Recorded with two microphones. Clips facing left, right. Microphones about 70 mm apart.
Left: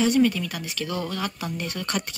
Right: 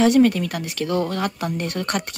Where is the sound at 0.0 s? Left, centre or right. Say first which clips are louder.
Right 5 dB; right.